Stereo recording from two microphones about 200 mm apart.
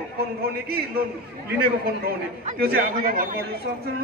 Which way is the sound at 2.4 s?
50° right (ahead or behind).